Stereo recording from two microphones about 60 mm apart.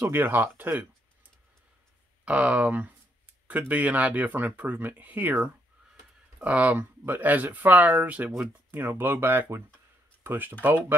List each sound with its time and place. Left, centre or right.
0.0 s speech: right
2.2 s speech: right
8.7 s speech: right